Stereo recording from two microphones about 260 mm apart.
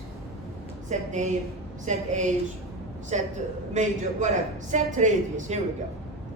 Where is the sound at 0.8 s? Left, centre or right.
Right.